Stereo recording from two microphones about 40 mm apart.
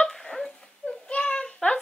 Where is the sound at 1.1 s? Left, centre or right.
Left.